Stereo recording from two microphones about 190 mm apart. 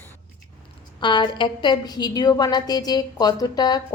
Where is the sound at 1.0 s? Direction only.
25° left (ahead or behind).